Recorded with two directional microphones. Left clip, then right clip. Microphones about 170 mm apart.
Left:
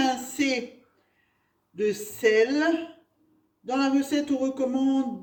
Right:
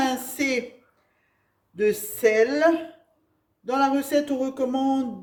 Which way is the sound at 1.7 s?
35° right (ahead or behind).